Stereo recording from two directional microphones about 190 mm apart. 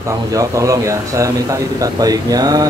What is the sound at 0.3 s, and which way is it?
Speech, 15° right (ahead or behind).